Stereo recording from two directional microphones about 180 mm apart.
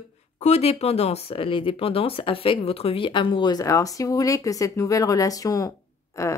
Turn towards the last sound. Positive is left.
turn(degrees=15)  # may be behind; listen again after turning